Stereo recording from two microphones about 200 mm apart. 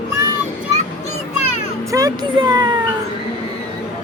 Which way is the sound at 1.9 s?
20° right (ahead or behind).